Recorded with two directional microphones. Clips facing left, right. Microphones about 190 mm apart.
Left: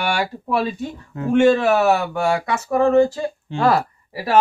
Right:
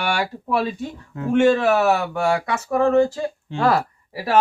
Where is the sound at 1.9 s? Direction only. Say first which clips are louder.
Left 1 dB; 5° left (ahead or behind).